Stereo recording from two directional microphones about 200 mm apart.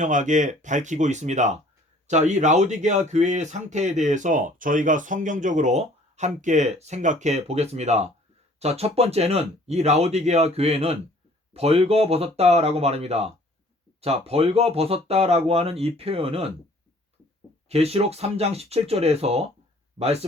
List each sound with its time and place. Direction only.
0.0 s speech: 40° right (ahead or behind)
17.7 s speech: 30° right (ahead or behind)